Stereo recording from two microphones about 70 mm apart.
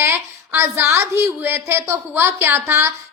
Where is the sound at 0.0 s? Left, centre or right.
Right.